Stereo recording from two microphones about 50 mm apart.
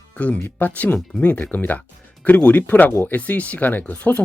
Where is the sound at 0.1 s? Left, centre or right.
Left.